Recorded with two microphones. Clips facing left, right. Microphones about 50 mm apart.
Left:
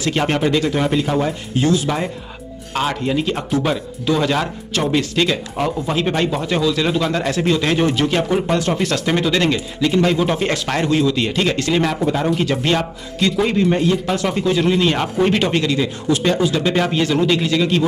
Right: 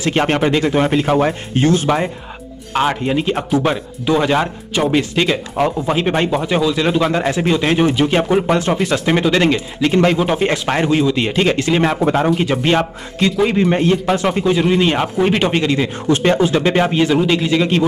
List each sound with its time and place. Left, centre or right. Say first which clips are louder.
0.0 s speech: right 3 dB; right
1.0 s speech: right 4 dB; right
2.7 s speech: right 3 dB; right
3.3 s speech: right 3 dB; centre; by 9.8 s right
9.8 s speech: right 3 dB; right
10.1 s speech: right 2 dB; centre